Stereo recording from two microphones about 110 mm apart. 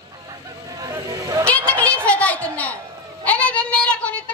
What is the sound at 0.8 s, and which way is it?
Vehicle, 30° right (ahead or behind).